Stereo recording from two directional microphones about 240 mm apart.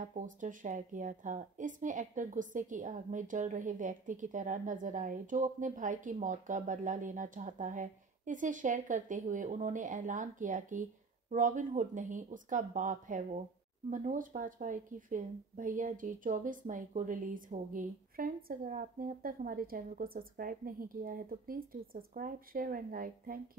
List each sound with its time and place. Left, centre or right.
0.0 s a woman's voice: right